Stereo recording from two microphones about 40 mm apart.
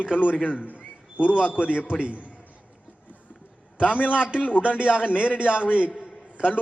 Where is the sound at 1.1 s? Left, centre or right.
Right.